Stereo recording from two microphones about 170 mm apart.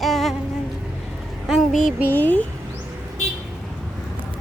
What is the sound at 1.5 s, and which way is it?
Speech, centre (ahead or behind).